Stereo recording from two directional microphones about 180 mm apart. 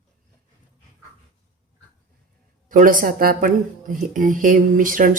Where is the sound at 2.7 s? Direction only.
45° right (ahead or behind).